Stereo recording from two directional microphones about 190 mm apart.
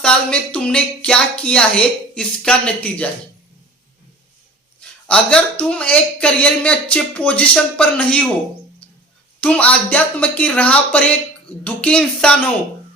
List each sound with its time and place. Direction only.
0.0 s speech: 5° left (ahead or behind)
4.8 s speech: 5° left (ahead or behind)
8.8 s a sound: 5° left (ahead or behind)
9.4 s speech: 5° left (ahead or behind)